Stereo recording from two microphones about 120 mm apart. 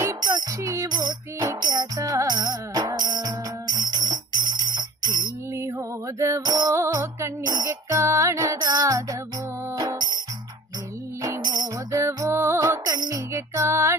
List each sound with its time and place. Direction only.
0.0 s music: 30° right (ahead or behind)
6.4 s music: 35° right (ahead or behind)
6.7 s music: 25° right (ahead or behind)
11.2 s music: 30° right (ahead or behind)